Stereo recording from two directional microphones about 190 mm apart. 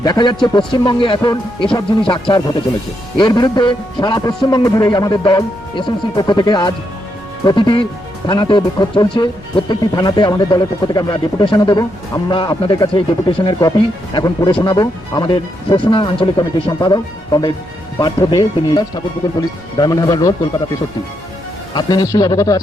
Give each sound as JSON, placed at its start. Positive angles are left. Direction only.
{"t": 0.0, "sound": "speech", "side_deg": 25}
{"t": 21.8, "sound": "speech", "side_deg": 20}